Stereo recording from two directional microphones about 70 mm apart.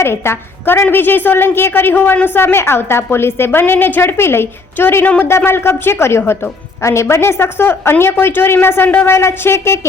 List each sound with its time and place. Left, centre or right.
0.0 s a woman's voice: left